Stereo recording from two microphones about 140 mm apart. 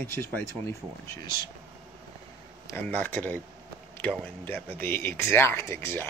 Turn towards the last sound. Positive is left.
turn(degrees=15)  # may be behind; listen again after turning